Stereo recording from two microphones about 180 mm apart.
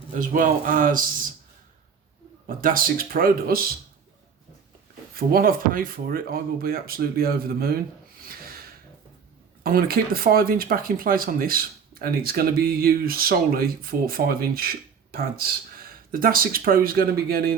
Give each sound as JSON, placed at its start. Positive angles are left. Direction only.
{"t": 0.1, "sound": "speech", "side_deg": -45}
{"t": 2.5, "sound": "speech", "side_deg": -50}
{"t": 5.1, "sound": "speech", "side_deg": -55}
{"t": 9.6, "sound": "speech", "side_deg": -55}